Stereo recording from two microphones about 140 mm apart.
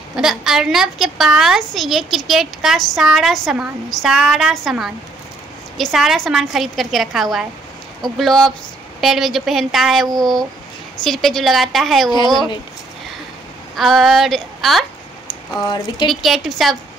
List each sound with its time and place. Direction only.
0.1 s a woman's voice: 5° right (ahead or behind)
13.7 s a woman's voice: centre (ahead or behind)
15.2 s speech: 30° left (ahead or behind)
16.1 s a woman's voice: centre (ahead or behind)